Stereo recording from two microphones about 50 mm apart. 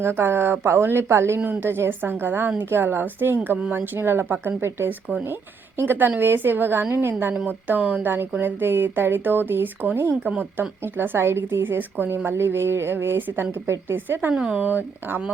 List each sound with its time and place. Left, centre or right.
0.0 s a woman's voice: right
7.4 s speech: right
8.0 s a woman's voice: right
10.2 s speech: right
10.8 s a woman's voice: right
14.3 s speech: centre
14.6 s speech: right